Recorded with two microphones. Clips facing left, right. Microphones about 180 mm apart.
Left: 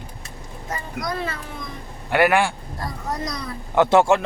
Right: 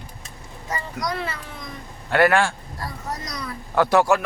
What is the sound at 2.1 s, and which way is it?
Speech, 15° left (ahead or behind).